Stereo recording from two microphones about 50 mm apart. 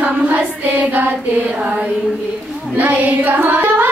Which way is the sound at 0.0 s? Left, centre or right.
Right.